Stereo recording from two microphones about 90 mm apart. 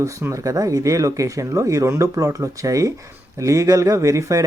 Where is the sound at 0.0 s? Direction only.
35° right (ahead or behind).